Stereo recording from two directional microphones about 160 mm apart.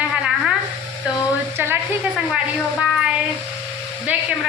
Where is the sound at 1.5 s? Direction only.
15° right (ahead or behind).